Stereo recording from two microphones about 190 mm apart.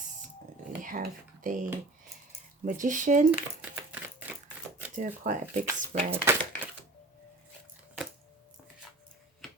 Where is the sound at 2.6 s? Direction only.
40° right (ahead or behind).